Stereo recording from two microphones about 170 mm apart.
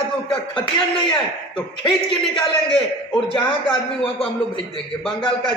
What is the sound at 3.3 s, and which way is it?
A man's voice, 30° left (ahead or behind).